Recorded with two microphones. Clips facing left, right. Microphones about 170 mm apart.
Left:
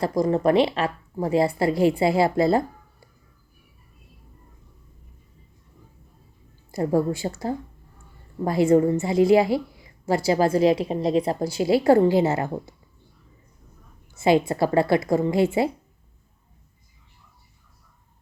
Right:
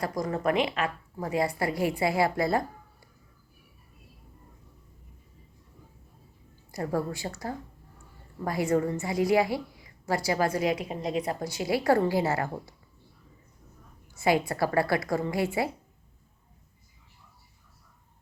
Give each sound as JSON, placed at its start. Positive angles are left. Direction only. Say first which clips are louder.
{"t": 0.0, "sound": "a woman's voice", "louder": "left 8 dB", "side_deg": 30}
{"t": 6.7, "sound": "a woman's voice", "louder": "left 8 dB", "side_deg": 25}
{"t": 14.1, "sound": "a woman's voice", "louder": "left 6 dB", "side_deg": 25}